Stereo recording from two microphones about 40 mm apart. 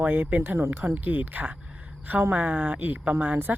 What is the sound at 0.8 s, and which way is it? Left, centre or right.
Speech, right.